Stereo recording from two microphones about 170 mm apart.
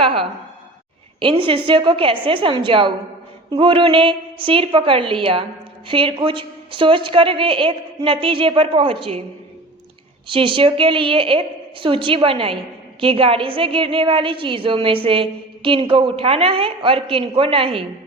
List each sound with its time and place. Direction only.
0.0 s a sound: 30° right (ahead or behind)
1.2 s a woman's voice: 30° right (ahead or behind)
10.2 s a woman's voice: 30° right (ahead or behind)